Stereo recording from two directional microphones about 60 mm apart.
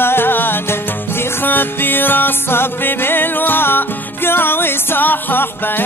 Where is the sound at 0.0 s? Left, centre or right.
Left.